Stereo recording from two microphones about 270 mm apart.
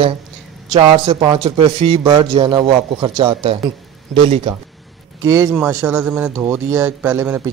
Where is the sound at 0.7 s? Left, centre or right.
Centre.